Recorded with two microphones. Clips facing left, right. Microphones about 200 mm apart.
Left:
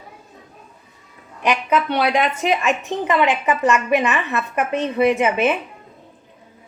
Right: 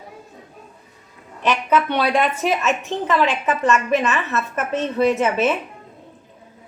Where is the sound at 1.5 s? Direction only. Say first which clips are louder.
Even; 10° left (ahead or behind).